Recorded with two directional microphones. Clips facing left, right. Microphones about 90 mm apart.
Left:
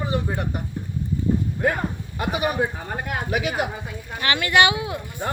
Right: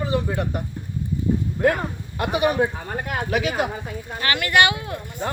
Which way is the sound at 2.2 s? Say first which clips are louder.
Right 3 dB; 5° left (ahead or behind).